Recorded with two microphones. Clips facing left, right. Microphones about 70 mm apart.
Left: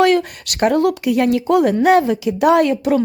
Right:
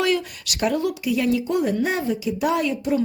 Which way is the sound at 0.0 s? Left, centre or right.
Left.